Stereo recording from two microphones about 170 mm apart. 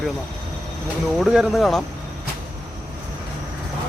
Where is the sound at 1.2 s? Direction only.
Centre (ahead or behind).